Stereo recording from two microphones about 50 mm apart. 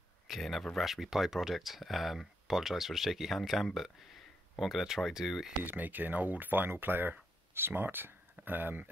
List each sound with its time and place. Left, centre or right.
0.3 s speech: centre
5.6 s speech: right